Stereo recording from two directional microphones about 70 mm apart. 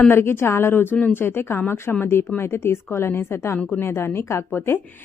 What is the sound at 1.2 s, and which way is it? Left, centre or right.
A woman's voice, left.